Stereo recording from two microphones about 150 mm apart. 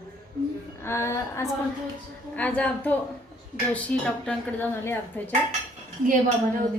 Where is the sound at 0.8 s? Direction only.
20° left (ahead or behind).